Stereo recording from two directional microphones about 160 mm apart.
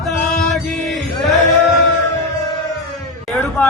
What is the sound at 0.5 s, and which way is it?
Mantra, centre (ahead or behind).